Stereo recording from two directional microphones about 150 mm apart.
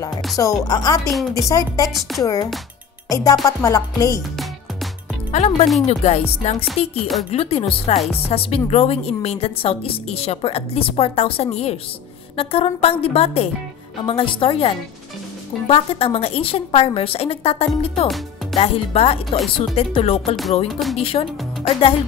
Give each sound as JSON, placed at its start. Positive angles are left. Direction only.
{"t": 0.4, "sound": "music", "side_deg": 25}
{"t": 1.9, "sound": "speech", "side_deg": 0}
{"t": 2.2, "sound": "music", "side_deg": 25}
{"t": 5.3, "sound": "music", "side_deg": 50}
{"t": 7.2, "sound": "a woman's voice", "side_deg": 40}
{"t": 7.9, "sound": "music", "side_deg": 45}
{"t": 8.3, "sound": "a woman's voice", "side_deg": 40}
{"t": 18.0, "sound": "music", "side_deg": 0}
{"t": 18.6, "sound": "a woman's voice", "side_deg": 40}
{"t": 19.3, "sound": "speech", "side_deg": 0}
{"t": 19.7, "sound": "a woman's voice", "side_deg": 40}